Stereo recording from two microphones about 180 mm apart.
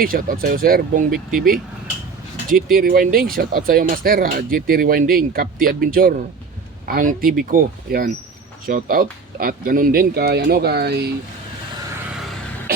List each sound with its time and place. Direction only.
0.0 s speech: 50° right (ahead or behind)
2.6 s speech: 55° right (ahead or behind)